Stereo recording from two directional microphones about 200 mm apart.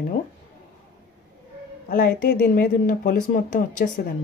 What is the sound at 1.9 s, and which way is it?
Speech, 50° left (ahead or behind).